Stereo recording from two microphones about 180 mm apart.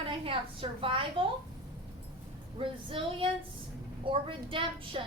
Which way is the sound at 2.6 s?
30° right (ahead or behind).